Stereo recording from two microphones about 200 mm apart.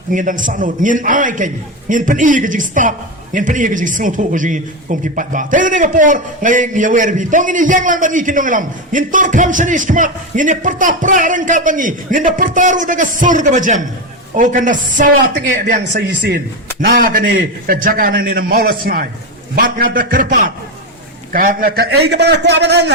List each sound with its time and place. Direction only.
0.1 s speech: 40° right (ahead or behind)
16.8 s a man's voice: 45° right (ahead or behind)